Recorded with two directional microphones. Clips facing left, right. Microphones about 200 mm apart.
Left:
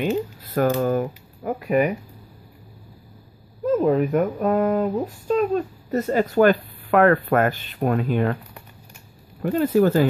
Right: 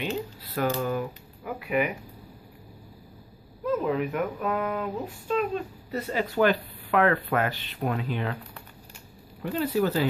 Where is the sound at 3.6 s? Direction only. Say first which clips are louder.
Left 7 dB; 40° left (ahead or behind).